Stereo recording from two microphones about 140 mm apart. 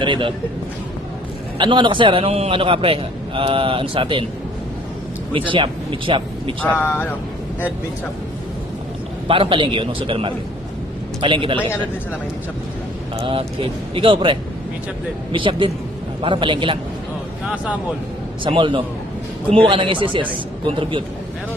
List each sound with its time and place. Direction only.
0.0 s a man's voice: 35° right (ahead or behind)
1.5 s a man's voice: 35° right (ahead or behind)
5.3 s speech: 35° right (ahead or behind)
6.6 s speech: 15° left (ahead or behind)
9.2 s a man's voice: 40° right (ahead or behind)
13.1 s a man's voice: 40° right (ahead or behind)
17.4 s speech: 10° right (ahead or behind)
18.4 s a man's voice: 35° right (ahead or behind)